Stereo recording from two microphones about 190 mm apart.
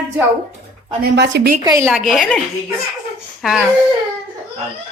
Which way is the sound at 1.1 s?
60° right (ahead or behind).